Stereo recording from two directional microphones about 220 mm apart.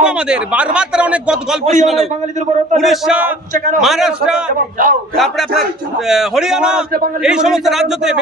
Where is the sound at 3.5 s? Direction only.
35° right (ahead or behind).